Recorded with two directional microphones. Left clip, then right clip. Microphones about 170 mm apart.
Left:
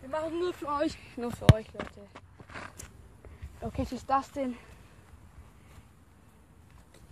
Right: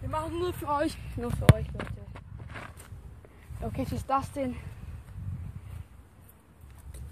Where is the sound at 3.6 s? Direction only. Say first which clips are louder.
Right 1 dB; centre (ahead or behind).